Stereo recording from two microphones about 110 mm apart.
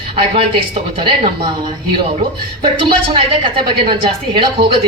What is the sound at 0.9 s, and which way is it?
Speech, 50° right (ahead or behind).